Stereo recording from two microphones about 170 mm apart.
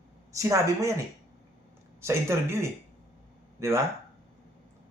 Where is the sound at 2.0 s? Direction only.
15° right (ahead or behind).